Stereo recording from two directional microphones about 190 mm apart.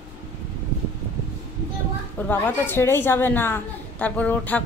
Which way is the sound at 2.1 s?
10° left (ahead or behind).